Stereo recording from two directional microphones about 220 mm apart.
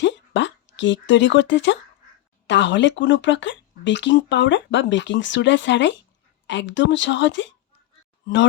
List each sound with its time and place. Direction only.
0.0 s speech: 55° left (ahead or behind)